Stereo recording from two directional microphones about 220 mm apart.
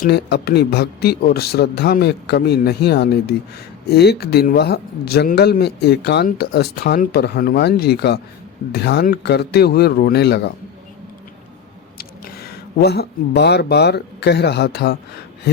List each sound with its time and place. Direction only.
0.0 s speech: 45° left (ahead or behind)
11.9 s speech: 45° left (ahead or behind)